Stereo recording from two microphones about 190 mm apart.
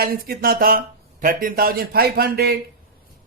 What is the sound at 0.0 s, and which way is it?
Speech, 50° right (ahead or behind).